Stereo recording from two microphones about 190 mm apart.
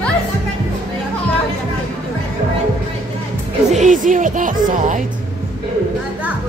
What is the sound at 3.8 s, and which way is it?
Speech, 40° right (ahead or behind).